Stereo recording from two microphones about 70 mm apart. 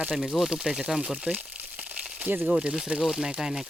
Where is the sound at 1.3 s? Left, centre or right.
Right.